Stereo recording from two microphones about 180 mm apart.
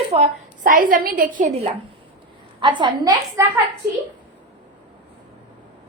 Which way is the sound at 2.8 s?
20° right (ahead or behind).